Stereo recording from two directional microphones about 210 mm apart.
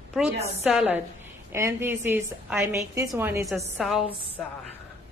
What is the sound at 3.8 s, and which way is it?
Speech, centre (ahead or behind).